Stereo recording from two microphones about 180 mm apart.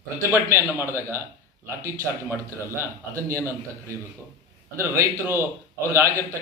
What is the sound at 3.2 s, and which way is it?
A man's voice, 15° right (ahead or behind).